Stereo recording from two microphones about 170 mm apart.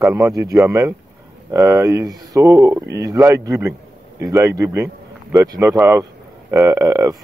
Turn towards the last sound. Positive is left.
turn(degrees=-20)  # may be behind; listen again after turning